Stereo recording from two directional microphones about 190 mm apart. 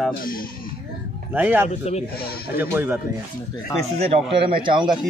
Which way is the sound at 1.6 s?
35° left (ahead or behind).